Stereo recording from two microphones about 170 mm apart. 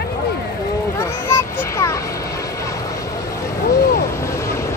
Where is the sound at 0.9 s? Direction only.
15° left (ahead or behind).